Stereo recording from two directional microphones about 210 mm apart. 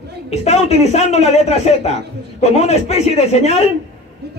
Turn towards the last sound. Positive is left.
turn(degrees=30)  # may be behind; listen again after turning